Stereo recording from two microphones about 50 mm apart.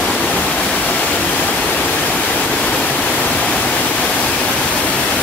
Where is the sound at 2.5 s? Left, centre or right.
Left.